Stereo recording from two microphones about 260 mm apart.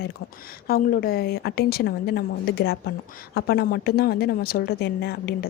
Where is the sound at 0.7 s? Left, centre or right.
Left.